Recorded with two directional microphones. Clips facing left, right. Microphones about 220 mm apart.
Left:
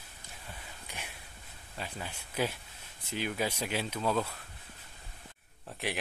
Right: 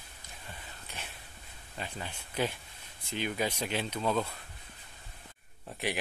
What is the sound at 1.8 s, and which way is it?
Speech, 5° left (ahead or behind).